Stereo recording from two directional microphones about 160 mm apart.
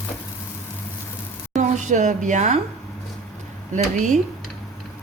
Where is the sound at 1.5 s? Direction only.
45° right (ahead or behind).